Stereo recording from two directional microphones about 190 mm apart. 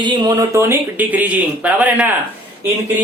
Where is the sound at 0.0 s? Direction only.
20° right (ahead or behind).